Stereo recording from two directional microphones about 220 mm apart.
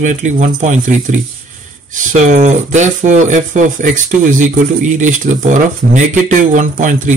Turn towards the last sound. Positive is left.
turn(degrees=-35)  # may be behind; listen again after turning